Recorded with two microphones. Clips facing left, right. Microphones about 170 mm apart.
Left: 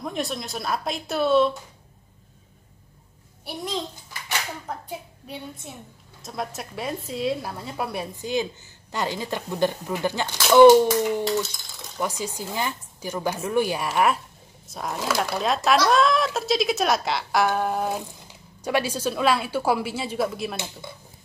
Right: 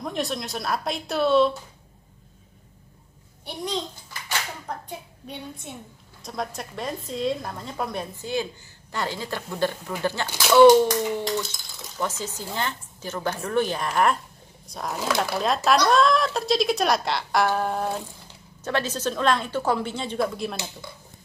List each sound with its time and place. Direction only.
0.0 s speech: centre (ahead or behind)
3.4 s speech: 5° left (ahead or behind)
10.9 s speech: 5° left (ahead or behind)